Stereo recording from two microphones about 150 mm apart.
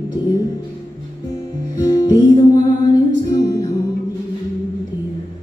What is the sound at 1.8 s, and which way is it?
Music, 25° left (ahead or behind).